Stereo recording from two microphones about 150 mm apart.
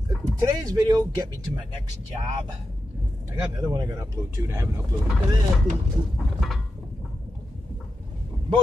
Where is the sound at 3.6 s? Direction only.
25° right (ahead or behind).